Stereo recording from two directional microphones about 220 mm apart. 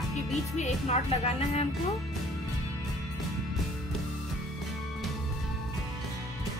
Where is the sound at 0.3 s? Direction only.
30° left (ahead or behind).